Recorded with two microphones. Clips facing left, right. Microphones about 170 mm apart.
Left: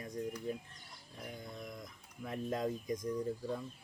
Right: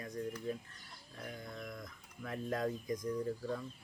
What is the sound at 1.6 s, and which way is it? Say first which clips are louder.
Speech: even; 20° left (ahead or behind).